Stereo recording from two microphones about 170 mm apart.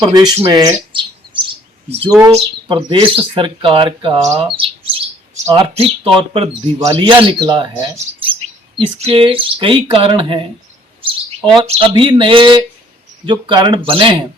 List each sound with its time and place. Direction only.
0.0 s speech: 20° right (ahead or behind)
0.4 s chirp: 20° right (ahead or behind)
2.3 s speech: 30° right (ahead or behind)
4.4 s bird: 30° right (ahead or behind)
6.1 s speech: 30° right (ahead or behind)
11.5 s speech: 35° right (ahead or behind)